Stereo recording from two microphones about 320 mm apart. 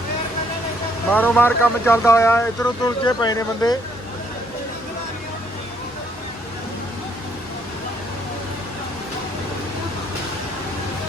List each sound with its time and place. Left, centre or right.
1.1 s speech: centre